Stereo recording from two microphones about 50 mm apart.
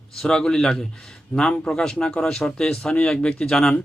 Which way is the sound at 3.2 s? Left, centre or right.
Left.